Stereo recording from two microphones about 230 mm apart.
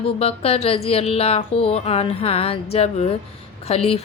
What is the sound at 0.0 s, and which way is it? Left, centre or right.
A woman's voice, left.